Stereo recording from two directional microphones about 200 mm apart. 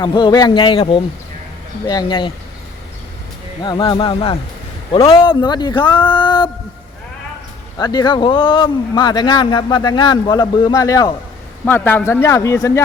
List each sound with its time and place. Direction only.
0.0 s speech: 20° left (ahead or behind)
3.6 s speech: 20° left (ahead or behind)
7.8 s a man's voice: 20° left (ahead or behind)